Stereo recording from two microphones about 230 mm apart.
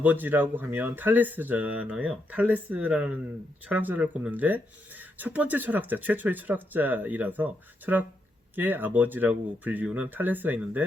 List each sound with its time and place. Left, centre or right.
0.0 s speech: centre